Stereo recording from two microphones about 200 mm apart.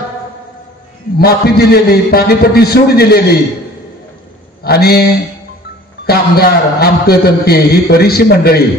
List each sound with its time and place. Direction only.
1.1 s a man's voice: 50° left (ahead or behind)
4.6 s a man's voice: 50° left (ahead or behind)
6.0 s a man's voice: 50° left (ahead or behind)